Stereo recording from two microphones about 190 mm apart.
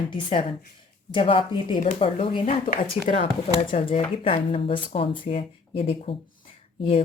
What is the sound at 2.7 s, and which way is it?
Speech, 40° left (ahead or behind).